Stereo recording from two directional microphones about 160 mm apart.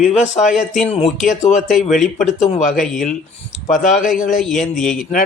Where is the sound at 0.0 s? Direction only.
5° right (ahead or behind).